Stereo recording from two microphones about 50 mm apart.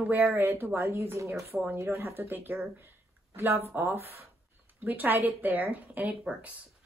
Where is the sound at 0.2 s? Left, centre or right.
Right.